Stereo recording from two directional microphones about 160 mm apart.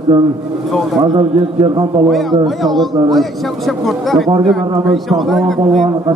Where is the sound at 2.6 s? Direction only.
Centre (ahead or behind).